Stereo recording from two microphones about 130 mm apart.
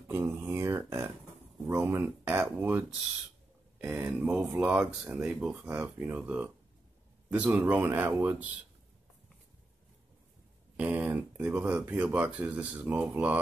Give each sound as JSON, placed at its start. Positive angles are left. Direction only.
{"t": 0.1, "sound": "speech", "side_deg": -20}
{"t": 10.8, "sound": "speech", "side_deg": -15}